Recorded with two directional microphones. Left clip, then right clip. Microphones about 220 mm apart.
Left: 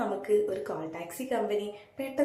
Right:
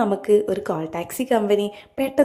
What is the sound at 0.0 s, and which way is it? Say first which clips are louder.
A woman's voice: right 9 dB; 45° right (ahead or behind).